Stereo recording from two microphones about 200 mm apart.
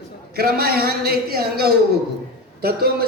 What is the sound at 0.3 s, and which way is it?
A man's voice, 50° right (ahead or behind).